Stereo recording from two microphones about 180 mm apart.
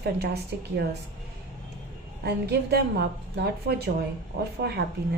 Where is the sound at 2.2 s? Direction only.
60° right (ahead or behind).